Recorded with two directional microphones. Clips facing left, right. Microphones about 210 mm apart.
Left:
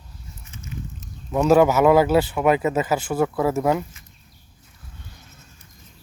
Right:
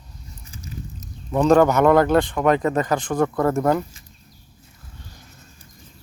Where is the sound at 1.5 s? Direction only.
5° left (ahead or behind).